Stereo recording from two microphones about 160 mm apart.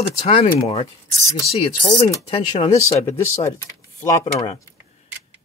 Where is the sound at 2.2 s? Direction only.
35° left (ahead or behind).